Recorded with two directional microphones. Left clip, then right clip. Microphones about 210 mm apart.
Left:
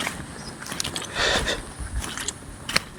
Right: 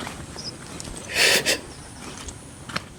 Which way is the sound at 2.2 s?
55° left (ahead or behind).